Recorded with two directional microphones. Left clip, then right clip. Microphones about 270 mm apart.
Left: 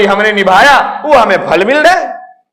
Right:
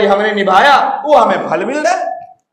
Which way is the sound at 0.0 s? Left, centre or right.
Left.